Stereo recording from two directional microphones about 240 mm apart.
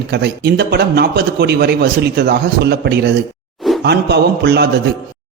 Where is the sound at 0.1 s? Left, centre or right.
Right.